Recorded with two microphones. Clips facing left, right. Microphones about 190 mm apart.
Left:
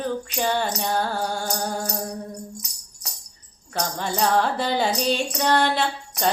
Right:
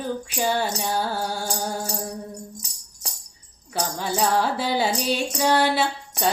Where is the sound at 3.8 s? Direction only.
5° right (ahead or behind).